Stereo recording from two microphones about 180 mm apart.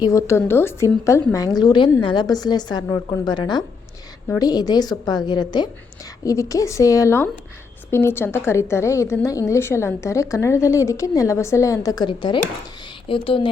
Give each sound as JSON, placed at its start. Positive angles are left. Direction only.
{"t": 0.0, "sound": "a woman's voice", "side_deg": 15}